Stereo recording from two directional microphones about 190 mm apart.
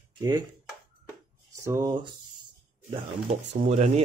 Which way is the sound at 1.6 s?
15° right (ahead or behind).